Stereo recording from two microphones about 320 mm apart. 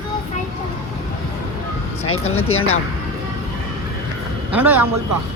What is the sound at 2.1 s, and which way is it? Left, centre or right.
Speech, centre.